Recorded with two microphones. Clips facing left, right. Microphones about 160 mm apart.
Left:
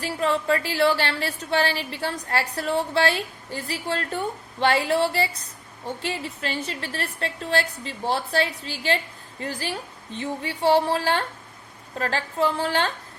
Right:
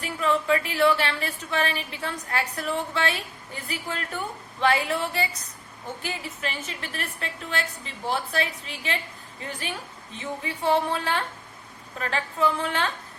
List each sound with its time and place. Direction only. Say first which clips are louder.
0.0 s speech: left 1 dB; 35° left (ahead or behind)